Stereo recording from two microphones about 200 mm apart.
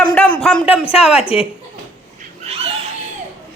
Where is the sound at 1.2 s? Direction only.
25° left (ahead or behind).